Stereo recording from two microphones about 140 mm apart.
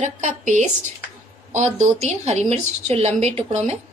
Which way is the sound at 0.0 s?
60° right (ahead or behind).